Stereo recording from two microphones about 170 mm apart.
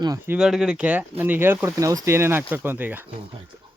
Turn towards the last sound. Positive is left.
turn(degrees=-10)  # may be behind; listen again after turning